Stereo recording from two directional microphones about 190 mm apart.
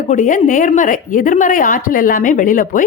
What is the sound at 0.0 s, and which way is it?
A woman's voice, 40° left (ahead or behind).